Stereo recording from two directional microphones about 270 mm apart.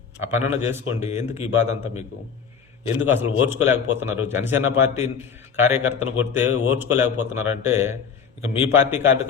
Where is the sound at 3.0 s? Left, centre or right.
Centre.